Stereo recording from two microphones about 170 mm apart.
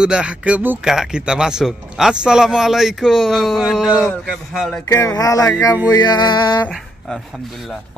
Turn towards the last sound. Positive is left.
turn(degrees=0)  # may be behind; listen again after turning